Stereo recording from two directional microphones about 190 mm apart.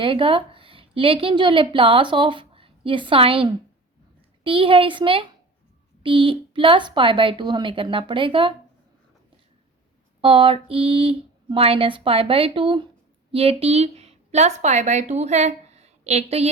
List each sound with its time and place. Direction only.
0.0 s a woman's voice: 25° right (ahead or behind)
10.2 s a woman's voice: 25° right (ahead or behind)